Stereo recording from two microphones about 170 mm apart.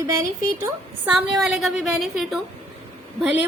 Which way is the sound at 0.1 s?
15° right (ahead or behind).